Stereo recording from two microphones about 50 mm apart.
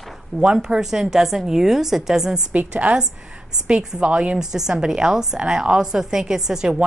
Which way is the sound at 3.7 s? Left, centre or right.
Centre.